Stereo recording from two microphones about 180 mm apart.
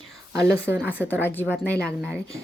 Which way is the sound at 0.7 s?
5° right (ahead or behind).